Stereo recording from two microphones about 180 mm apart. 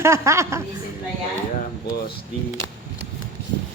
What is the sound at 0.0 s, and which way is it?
Speech, 15° right (ahead or behind).